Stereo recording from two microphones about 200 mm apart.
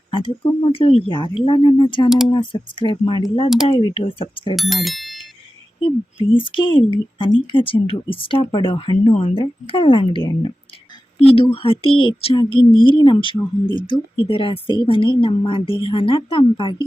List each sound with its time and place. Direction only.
0.1 s a woman's voice: 25° left (ahead or behind)
2.0 s speech: centre (ahead or behind)
2.3 s a woman's voice: 25° left (ahead or behind)
4.5 s speech: centre (ahead or behind)
6.3 s a woman's voice: 25° left (ahead or behind)